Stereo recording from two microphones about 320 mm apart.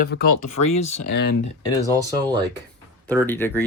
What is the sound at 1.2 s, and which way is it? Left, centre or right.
Speech, left.